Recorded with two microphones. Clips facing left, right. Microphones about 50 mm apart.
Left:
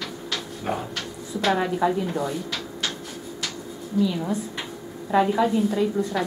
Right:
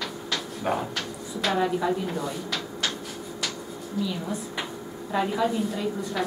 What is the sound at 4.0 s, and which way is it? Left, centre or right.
Speech, centre.